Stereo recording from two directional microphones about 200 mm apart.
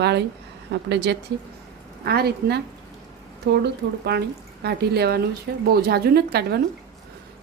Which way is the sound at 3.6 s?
55° right (ahead or behind).